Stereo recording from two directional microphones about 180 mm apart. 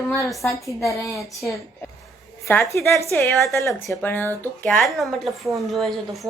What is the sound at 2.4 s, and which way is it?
A woman's voice, 15° left (ahead or behind).